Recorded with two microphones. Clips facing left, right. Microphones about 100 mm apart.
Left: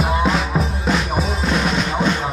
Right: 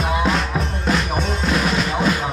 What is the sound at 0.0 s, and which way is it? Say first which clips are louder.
Music: left 1 dB; centre (ahead or behind).